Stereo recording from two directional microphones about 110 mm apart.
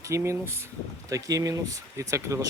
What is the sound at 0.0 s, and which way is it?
Speech, 25° right (ahead or behind).